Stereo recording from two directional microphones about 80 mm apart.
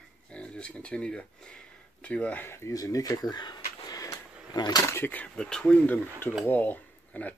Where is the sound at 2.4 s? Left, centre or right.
Left.